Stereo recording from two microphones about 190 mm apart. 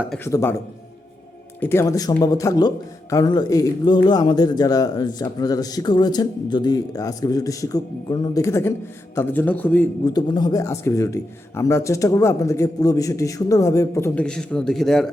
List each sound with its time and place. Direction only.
0.3 s a man's voice: 15° left (ahead or behind)
1.6 s a man's voice: 15° left (ahead or behind)
10.1 s a man's voice: 20° left (ahead or behind); by 15.1 s centre (ahead or behind)